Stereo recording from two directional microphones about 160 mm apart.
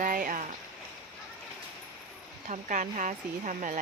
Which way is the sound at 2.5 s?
50° right (ahead or behind).